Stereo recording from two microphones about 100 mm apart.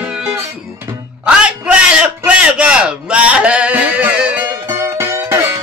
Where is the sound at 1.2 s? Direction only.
10° right (ahead or behind).